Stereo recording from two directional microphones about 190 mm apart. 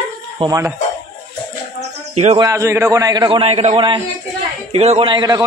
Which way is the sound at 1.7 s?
35° right (ahead or behind).